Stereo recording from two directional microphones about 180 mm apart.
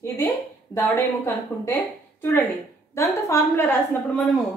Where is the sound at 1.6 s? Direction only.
15° left (ahead or behind).